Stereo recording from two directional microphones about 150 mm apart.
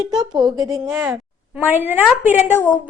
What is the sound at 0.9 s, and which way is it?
Speech, centre (ahead or behind).